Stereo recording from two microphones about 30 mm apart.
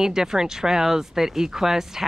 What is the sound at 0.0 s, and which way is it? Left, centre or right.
Speech, centre.